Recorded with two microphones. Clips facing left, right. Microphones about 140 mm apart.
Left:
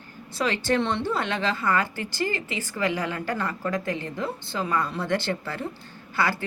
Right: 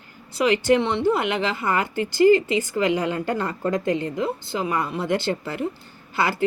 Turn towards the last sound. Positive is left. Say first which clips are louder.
# right 3 dB
turn(degrees=-15)  # may be behind; listen again after turning